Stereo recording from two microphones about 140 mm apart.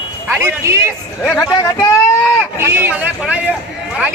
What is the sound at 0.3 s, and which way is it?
Speech, 15° right (ahead or behind).